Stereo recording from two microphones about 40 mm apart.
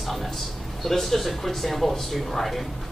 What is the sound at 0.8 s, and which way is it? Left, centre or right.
Speech, centre.